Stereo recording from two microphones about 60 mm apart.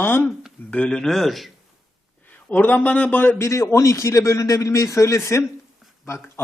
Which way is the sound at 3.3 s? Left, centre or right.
Left.